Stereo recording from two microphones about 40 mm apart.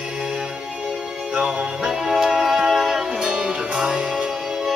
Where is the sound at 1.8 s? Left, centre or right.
Centre.